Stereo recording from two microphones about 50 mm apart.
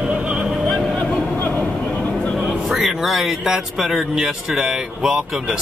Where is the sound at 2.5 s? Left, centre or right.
Centre.